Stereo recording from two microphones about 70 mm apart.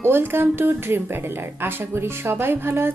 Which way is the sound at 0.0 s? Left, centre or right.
Right.